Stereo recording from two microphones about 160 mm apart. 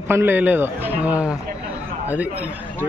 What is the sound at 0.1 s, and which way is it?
Speech, 15° right (ahead or behind).